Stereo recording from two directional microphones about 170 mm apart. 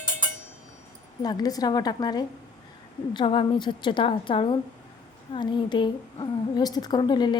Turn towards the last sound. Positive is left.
turn(degrees=25)  # may be behind; listen again after turning